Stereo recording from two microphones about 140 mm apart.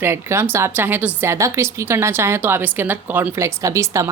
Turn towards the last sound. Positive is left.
turn(degrees=-20)  # may be behind; listen again after turning